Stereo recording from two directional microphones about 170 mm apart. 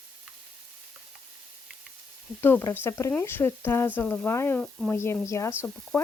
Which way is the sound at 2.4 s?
15° left (ahead or behind).